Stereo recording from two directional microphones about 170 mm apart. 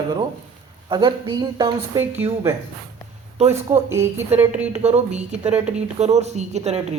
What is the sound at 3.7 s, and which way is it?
Speech, 15° right (ahead or behind).